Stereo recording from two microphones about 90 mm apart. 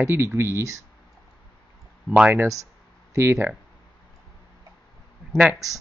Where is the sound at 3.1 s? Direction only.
30° right (ahead or behind).